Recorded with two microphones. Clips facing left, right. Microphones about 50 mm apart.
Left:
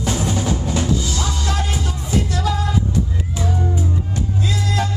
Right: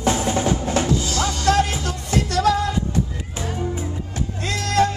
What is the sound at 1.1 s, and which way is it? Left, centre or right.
Music, right.